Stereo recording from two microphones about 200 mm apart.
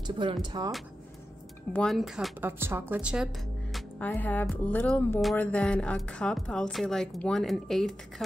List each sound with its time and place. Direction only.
0.0 s speech: 20° right (ahead or behind)
1.7 s speech: 5° left (ahead or behind)
2.4 s a woman's voice: 10° right (ahead or behind)
3.7 s speech: 10° left (ahead or behind)